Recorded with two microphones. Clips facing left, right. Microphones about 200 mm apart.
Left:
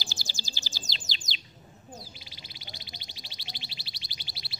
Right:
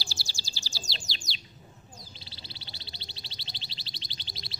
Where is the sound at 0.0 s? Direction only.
20° left (ahead or behind).